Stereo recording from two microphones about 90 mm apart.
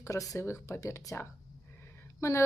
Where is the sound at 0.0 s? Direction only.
40° left (ahead or behind).